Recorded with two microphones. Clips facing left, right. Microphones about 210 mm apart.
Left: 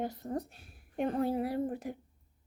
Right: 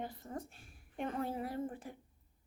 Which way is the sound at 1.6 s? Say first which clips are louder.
Left 7 dB; 40° left (ahead or behind).